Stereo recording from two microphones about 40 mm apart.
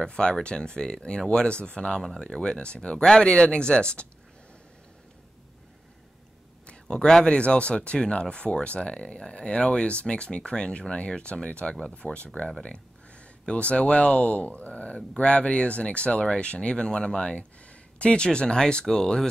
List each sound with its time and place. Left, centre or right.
0.0 s speech: left
6.6 s a sound: left
7.2 s speech: left